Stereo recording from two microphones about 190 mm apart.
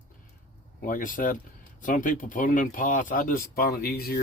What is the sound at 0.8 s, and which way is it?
Speech, 45° left (ahead or behind).